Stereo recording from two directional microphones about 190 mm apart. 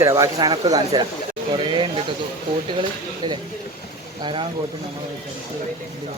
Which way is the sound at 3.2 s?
20° right (ahead or behind).